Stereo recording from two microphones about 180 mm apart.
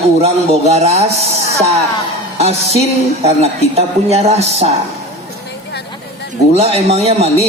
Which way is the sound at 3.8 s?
35° right (ahead or behind).